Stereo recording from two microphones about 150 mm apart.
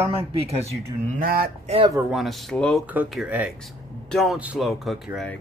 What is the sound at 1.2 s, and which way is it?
Speech, 80° right.